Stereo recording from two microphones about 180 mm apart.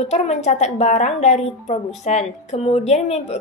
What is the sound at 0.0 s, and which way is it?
A woman's voice, 35° left (ahead or behind).